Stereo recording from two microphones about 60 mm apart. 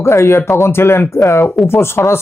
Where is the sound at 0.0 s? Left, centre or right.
Left.